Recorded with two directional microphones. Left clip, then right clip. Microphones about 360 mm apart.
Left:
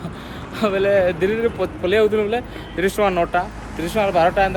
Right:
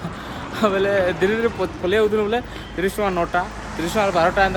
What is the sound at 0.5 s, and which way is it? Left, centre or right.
Speech, centre.